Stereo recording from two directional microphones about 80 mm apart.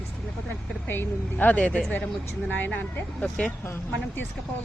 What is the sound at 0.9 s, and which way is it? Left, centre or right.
A woman's voice, left.